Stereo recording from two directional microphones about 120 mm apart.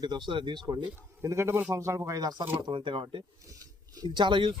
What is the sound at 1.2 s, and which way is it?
Speech, 25° right (ahead or behind).